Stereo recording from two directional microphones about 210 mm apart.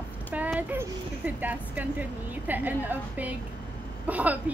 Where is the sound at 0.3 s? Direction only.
5° right (ahead or behind).